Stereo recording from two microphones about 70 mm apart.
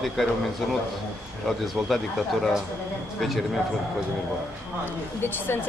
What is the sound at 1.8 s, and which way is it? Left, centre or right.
Speech, centre.